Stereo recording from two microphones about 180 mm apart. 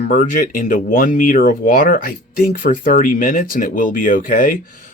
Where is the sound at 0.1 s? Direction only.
45° left (ahead or behind).